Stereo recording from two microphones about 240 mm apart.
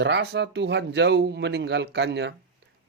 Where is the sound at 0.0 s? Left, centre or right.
Right.